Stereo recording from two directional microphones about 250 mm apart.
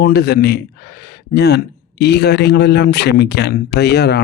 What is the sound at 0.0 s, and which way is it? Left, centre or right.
Speech, left.